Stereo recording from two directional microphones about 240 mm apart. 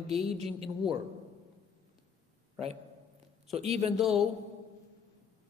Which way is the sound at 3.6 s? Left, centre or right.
Right.